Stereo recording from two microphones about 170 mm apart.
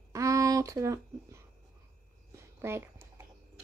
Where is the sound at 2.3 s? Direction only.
15° right (ahead or behind).